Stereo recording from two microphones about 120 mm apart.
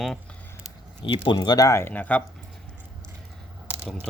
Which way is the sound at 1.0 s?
45° left (ahead or behind).